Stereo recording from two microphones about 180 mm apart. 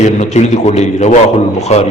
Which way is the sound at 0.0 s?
40° left (ahead or behind).